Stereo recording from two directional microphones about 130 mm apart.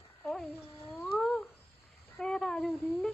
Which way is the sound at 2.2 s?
5° left (ahead or behind).